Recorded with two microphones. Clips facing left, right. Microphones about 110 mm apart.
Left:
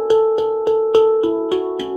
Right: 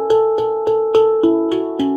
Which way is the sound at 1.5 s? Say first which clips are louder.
Even; 20° left (ahead or behind).